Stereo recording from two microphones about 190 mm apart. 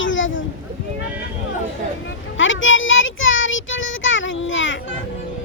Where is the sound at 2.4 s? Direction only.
90° left.